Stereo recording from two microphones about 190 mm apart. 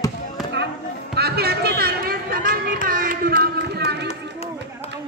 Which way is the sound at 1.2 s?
55° right (ahead or behind).